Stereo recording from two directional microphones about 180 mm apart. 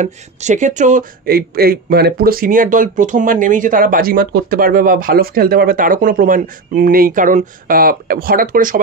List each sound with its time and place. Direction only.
0.0 s speech: 40° right (ahead or behind)